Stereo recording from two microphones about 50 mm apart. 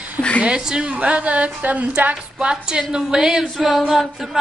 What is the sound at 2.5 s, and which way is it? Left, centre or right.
Speech, centre.